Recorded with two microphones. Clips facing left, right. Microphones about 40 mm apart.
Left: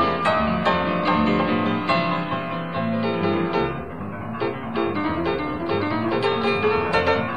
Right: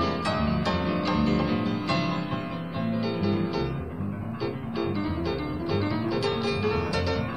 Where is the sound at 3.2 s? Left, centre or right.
Left.